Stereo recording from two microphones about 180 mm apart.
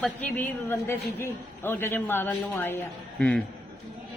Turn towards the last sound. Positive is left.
turn(degrees=5)  # may be behind; listen again after turning